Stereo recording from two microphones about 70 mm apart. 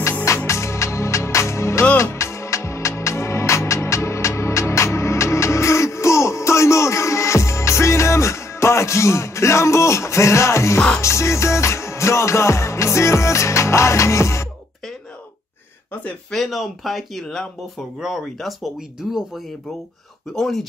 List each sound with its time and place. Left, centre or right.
0.5 s music: left
16.3 s speech: centre
20.3 s speech: centre